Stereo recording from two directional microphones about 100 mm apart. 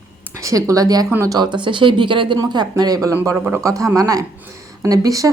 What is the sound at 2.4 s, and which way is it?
Speech, 40° right (ahead or behind).